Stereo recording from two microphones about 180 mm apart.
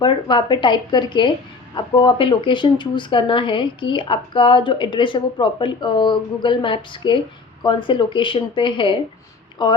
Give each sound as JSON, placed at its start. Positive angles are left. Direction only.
{"t": 0.0, "sound": "speech", "side_deg": 25}